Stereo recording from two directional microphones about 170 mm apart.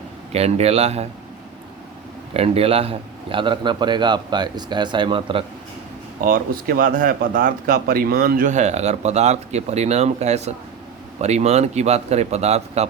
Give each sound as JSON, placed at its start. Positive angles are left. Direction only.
{"t": 0.3, "sound": "speech", "side_deg": -40}
{"t": 2.3, "sound": "a man's voice", "side_deg": -35}
{"t": 6.2, "sound": "a man's voice", "side_deg": -55}